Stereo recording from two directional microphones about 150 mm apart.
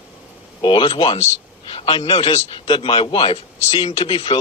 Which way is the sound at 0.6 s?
30° left (ahead or behind).